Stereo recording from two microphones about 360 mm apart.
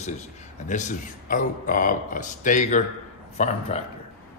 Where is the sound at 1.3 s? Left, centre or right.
Left.